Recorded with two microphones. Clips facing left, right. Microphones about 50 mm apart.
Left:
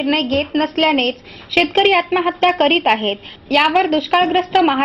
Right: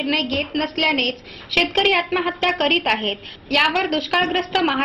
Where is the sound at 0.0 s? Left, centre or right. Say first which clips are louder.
Left 5 dB; left.